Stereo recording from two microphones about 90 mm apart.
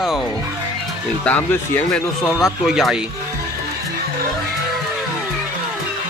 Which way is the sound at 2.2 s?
5° right (ahead or behind).